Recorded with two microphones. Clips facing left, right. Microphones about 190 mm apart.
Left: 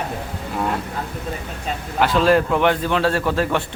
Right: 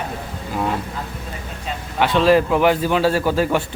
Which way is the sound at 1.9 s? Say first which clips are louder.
Right 1 dB; centre (ahead or behind).